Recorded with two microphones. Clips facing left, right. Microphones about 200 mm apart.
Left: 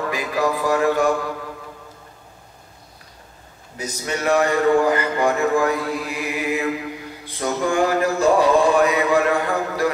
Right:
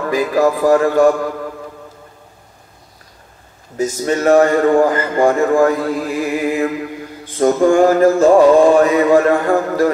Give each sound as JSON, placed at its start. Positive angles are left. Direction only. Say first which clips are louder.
{"t": 0.1, "sound": "a man's voice", "louder": "right 10 dB", "side_deg": -45}
{"t": 3.7, "sound": "a man's voice", "louder": "right 10 dB", "side_deg": -45}